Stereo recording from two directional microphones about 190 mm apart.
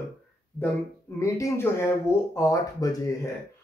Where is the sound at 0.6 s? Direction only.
15° left (ahead or behind).